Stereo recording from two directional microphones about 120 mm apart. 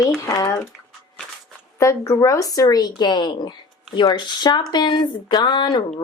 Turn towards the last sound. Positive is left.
turn(degrees=40)  # may be behind; listen again after turning